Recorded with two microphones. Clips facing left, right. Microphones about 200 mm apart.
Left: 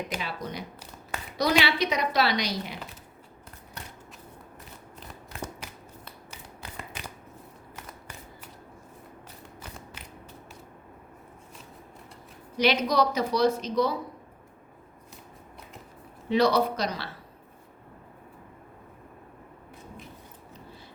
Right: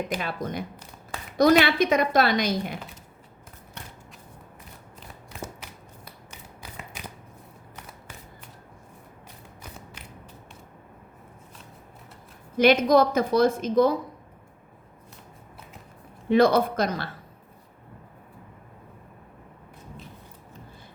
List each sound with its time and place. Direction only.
0.2 s a woman's voice: 50° right (ahead or behind)
4.9 s shuffling cards: 5° right (ahead or behind)
12.5 s a woman's voice: 50° right (ahead or behind)
16.3 s a woman's voice: 50° right (ahead or behind)